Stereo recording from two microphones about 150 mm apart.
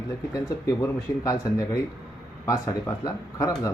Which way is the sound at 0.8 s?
25° left (ahead or behind).